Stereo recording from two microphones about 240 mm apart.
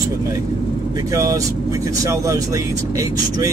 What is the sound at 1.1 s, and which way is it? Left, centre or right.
Speech, centre.